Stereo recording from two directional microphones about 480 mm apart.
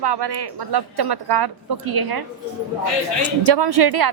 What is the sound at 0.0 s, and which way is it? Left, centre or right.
A woman's voice, right.